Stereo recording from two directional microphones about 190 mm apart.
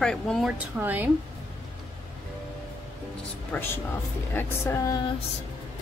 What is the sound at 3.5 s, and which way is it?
Speech, 10° left (ahead or behind).